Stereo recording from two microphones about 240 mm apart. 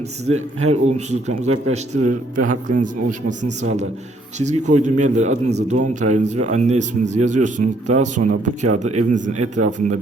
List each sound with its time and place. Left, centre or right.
0.3 s a man's voice: right